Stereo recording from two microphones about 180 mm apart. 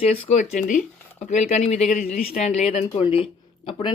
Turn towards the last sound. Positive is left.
turn(degrees=25)  # may be behind; listen again after turning